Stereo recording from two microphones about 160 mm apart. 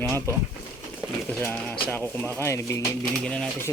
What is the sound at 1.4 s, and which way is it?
Speech, 10° left (ahead or behind).